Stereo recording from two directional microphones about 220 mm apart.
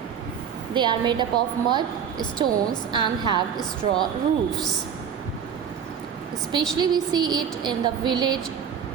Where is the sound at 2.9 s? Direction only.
20° right (ahead or behind).